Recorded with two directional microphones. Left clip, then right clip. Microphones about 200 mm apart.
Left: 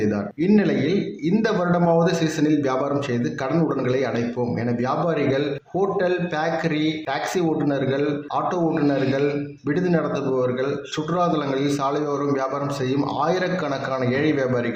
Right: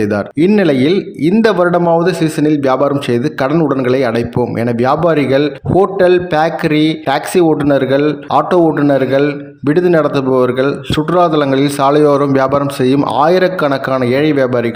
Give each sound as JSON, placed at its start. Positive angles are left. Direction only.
{"t": 0.1, "sound": "a man's voice", "side_deg": -45}